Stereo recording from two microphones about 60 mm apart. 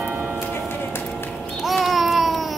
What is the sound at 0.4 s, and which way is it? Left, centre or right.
Music, left.